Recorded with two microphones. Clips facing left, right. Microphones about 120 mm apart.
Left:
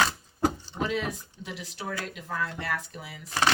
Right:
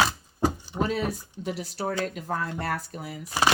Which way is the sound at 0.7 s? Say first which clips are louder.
Right 3 dB; 40° right (ahead or behind).